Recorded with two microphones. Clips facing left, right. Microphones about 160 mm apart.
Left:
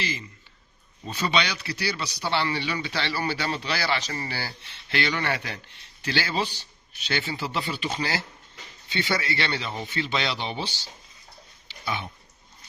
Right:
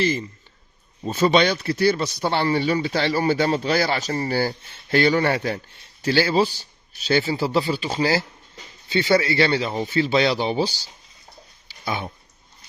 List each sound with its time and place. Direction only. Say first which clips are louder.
0.0 s speech: right 11 dB; 50° right (ahead or behind)
11.9 s speech: right 4 dB; 40° right (ahead or behind)